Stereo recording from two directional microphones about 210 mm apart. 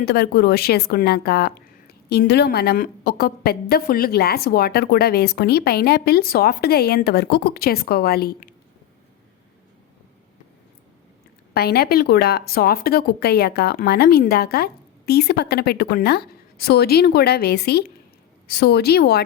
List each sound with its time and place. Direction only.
0.0 s speech: 50° left (ahead or behind)
11.5 s speech: 50° left (ahead or behind)